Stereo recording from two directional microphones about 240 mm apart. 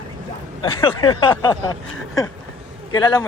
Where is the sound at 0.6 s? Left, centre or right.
Left.